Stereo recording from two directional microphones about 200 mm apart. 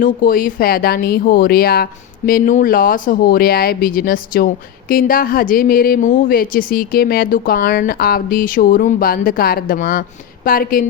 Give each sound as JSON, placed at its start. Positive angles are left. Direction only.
{"t": 0.0, "sound": "speech", "side_deg": 45}